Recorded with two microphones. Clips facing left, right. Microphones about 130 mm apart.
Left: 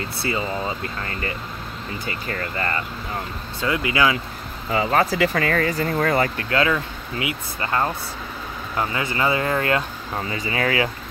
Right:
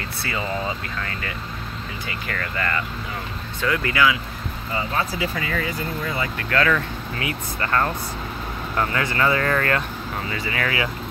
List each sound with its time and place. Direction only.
2.0 s speech: 30° left (ahead or behind)
4.7 s speech: 75° left (ahead or behind); by 5.8 s 55° left (ahead or behind)
5.8 s speech: 75° left (ahead or behind)
6.5 s speech: 20° left (ahead or behind)